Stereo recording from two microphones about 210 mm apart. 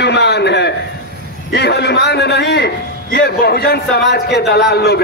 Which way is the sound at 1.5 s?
50° left (ahead or behind).